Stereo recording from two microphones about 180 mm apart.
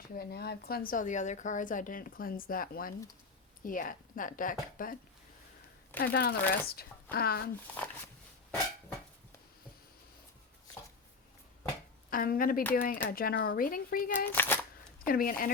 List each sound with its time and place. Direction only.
0.2 s a woman's voice: 60° left (ahead or behind)
6.0 s speech: 55° left (ahead or behind)
12.1 s a woman's voice: 50° left (ahead or behind)
14.3 s speech: 10° left (ahead or behind)
15.0 s a woman's voice: 55° left (ahead or behind)